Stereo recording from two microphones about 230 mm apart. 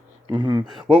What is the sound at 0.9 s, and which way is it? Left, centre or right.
Speech, right.